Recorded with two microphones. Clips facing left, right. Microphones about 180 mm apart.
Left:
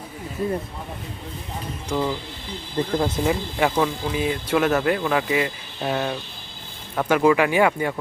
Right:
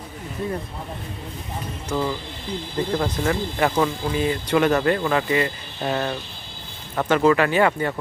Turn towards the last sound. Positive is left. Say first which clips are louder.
# even
turn(degrees=10)  # may be behind; listen again after turning